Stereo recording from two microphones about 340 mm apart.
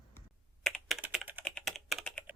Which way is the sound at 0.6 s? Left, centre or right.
Centre.